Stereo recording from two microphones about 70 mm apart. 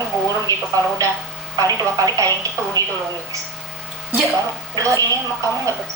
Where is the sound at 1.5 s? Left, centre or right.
Right.